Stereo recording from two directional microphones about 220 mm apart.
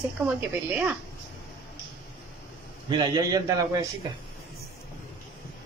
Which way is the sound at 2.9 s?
20° right (ahead or behind).